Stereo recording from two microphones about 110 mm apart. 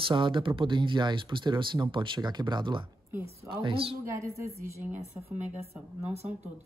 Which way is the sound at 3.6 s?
55° right (ahead or behind).